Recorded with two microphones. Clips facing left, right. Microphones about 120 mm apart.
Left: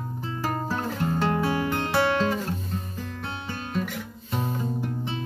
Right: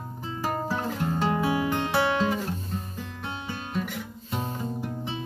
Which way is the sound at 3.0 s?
10° right (ahead or behind).